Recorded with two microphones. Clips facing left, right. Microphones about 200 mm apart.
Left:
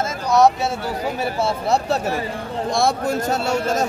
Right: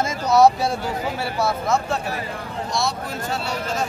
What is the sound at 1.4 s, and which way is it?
Speech, 30° left (ahead or behind).